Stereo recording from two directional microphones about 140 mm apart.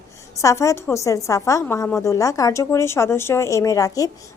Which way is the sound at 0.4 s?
20° left (ahead or behind).